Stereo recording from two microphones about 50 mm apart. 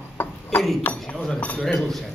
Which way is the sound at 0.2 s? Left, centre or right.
Left.